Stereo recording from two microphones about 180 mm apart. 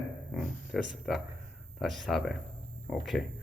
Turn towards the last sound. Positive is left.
turn(degrees=0)  # may be behind; listen again after turning